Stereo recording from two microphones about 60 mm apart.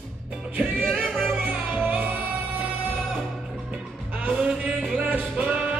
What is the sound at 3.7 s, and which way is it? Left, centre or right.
Music, right.